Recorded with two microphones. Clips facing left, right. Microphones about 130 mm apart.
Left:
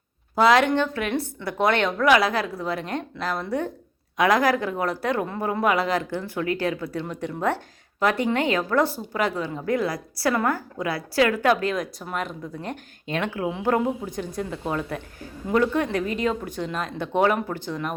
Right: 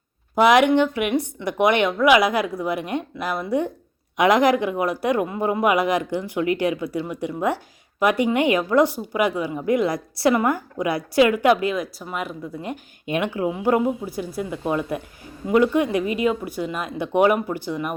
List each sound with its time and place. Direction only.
0.3 s speech: 15° right (ahead or behind)